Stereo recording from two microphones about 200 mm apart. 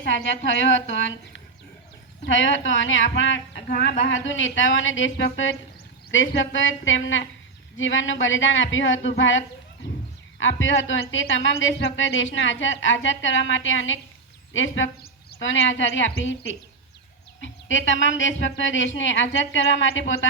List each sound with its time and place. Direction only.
0.0 s a woman's voice: 70° left (ahead or behind)
2.2 s a woman's voice: 70° left (ahead or behind)
10.4 s a woman's voice: 70° left (ahead or behind)
15.0 s a woman's voice: 60° left (ahead or behind)